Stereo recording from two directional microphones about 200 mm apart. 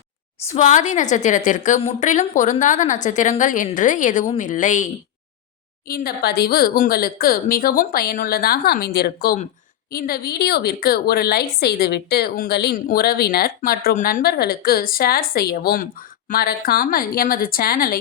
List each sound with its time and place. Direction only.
0.5 s a woman's voice: 35° left (ahead or behind)
5.9 s a woman's voice: 50° left (ahead or behind)